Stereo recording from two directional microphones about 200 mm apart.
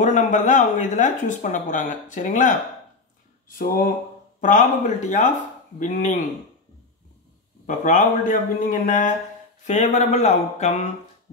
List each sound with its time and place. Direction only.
0.0 s speech: 40° left (ahead or behind)
7.6 s speech: 35° left (ahead or behind)